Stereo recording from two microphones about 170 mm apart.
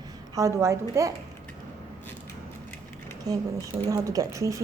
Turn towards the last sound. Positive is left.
turn(degrees=-20)  # may be behind; listen again after turning